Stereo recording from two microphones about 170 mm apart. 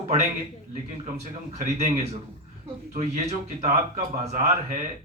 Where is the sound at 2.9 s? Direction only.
40° right (ahead or behind).